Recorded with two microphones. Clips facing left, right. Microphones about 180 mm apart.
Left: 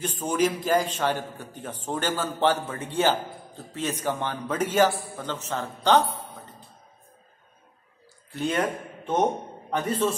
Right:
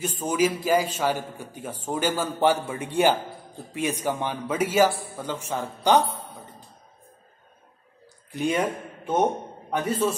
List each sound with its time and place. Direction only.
0.0 s a man's voice: 10° right (ahead or behind)
8.3 s a man's voice: 10° right (ahead or behind)